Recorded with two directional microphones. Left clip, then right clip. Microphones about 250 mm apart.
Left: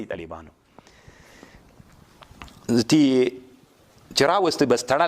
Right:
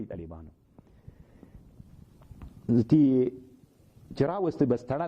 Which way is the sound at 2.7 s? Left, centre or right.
Centre.